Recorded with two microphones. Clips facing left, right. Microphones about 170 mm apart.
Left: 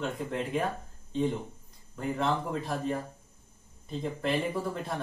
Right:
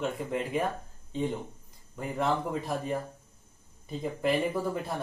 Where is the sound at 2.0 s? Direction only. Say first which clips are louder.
Even; centre (ahead or behind).